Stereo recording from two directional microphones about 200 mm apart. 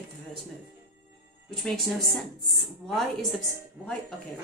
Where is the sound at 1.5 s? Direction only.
Centre (ahead or behind).